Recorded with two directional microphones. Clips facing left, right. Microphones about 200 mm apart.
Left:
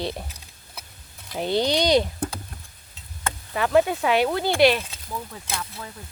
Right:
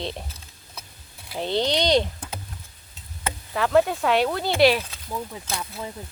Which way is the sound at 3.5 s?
Centre (ahead or behind).